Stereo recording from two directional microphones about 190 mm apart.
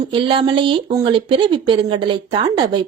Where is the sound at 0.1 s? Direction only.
25° right (ahead or behind).